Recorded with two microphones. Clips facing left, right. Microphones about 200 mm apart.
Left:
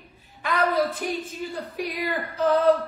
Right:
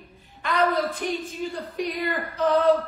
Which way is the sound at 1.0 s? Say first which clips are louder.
Right 1 dB; 5° left (ahead or behind).